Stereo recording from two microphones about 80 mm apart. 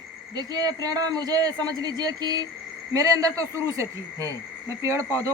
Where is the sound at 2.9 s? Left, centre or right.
Right.